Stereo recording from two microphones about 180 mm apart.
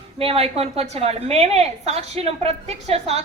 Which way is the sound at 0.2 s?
35° right (ahead or behind).